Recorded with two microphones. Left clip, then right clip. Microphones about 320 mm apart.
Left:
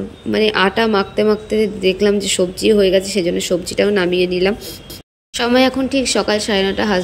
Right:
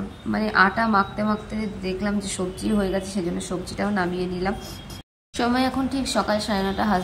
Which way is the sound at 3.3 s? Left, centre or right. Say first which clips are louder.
Left 12 dB; centre.